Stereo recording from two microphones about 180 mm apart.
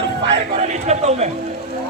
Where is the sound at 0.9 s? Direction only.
40° right (ahead or behind).